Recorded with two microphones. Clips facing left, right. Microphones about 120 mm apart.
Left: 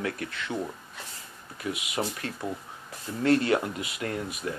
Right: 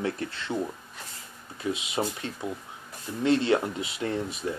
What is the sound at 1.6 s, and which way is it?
Speech, 25° right (ahead or behind).